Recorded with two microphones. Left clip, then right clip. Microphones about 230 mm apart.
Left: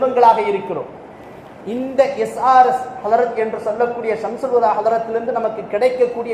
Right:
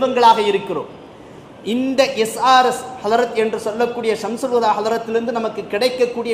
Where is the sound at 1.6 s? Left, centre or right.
Right.